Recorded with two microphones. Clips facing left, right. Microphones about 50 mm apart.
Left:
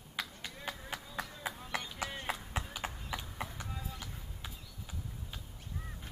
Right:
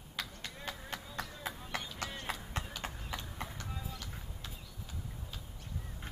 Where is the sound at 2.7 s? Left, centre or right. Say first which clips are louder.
Left 2 dB; centre.